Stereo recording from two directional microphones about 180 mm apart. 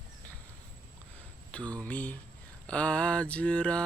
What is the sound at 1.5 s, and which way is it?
Speech, 5° left (ahead or behind).